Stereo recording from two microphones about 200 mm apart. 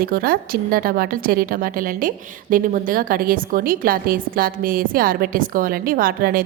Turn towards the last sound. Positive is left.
turn(degrees=-45)  # may be behind; listen again after turning